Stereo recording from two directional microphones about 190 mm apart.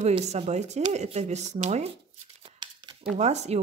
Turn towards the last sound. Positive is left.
turn(degrees=-35)  # may be behind; listen again after turning